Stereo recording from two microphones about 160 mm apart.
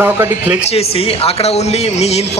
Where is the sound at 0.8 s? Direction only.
40° left (ahead or behind).